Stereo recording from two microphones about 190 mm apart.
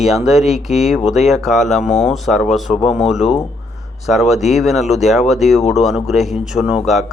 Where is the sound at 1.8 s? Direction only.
40° left (ahead or behind).